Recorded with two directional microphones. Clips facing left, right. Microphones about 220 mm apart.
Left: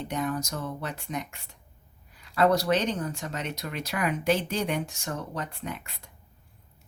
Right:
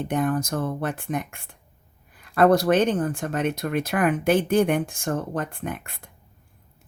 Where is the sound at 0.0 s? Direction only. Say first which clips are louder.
Right 6 dB; 50° right (ahead or behind).